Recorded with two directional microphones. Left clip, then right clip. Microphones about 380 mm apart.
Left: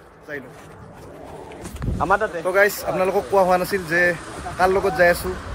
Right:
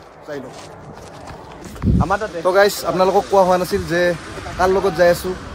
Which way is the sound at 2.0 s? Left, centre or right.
Left.